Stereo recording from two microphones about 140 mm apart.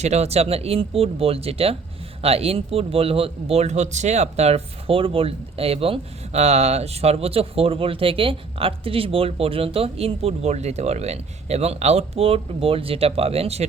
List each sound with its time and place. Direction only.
0.0 s a man's voice: 50° right (ahead or behind)